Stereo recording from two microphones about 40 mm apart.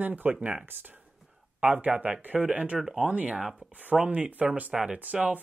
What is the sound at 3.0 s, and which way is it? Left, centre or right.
Speech, right.